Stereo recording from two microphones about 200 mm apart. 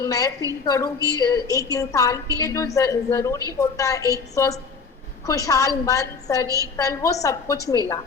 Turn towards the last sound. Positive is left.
turn(degrees=15)  # may be behind; listen again after turning